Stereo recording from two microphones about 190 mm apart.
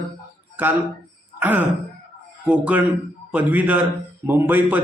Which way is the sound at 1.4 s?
10° right (ahead or behind).